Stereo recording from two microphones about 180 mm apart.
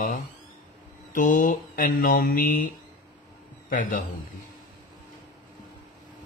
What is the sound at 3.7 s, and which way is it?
Speech, 50° left (ahead or behind).